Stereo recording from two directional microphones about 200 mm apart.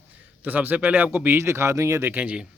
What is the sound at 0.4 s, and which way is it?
Speech, 10° right (ahead or behind).